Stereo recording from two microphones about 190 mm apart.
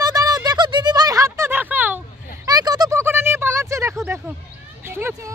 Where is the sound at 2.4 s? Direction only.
20° right (ahead or behind).